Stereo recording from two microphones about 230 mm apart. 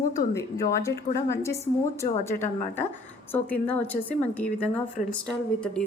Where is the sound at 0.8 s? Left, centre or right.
Centre.